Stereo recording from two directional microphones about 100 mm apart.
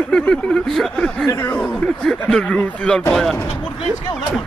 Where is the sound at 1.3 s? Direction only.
20° left (ahead or behind).